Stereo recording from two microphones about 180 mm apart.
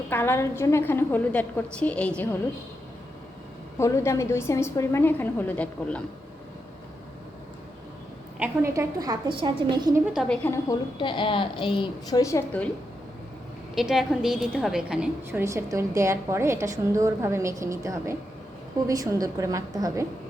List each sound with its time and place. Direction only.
0.1 s a woman's voice: 10° left (ahead or behind)
3.8 s a woman's voice: 15° left (ahead or behind)
8.4 s a woman's voice: 15° right (ahead or behind)
10.1 s a woman's voice: 5° right (ahead or behind)
10.4 s a woman's voice: 15° left (ahead or behind)
10.9 s a woman's voice: 25° left (ahead or behind)
13.7 s a woman's voice: centre (ahead or behind); by 20.1 s 20° right (ahead or behind)